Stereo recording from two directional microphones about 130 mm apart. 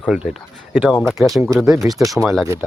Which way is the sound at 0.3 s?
10° right (ahead or behind).